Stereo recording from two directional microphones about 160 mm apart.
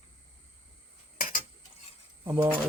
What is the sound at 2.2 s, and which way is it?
Speech, 15° right (ahead or behind).